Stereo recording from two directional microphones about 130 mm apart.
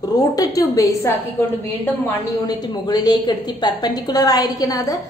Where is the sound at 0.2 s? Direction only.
30° left (ahead or behind).